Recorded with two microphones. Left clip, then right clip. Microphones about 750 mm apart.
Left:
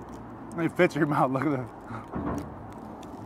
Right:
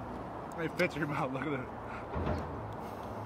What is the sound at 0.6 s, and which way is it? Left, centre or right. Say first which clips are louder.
A man's voice: left 9 dB; left.